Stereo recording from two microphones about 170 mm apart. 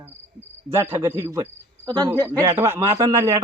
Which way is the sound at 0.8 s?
15° right (ahead or behind).